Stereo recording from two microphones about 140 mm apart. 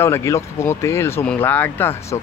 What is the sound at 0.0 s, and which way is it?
Speech, 20° left (ahead or behind).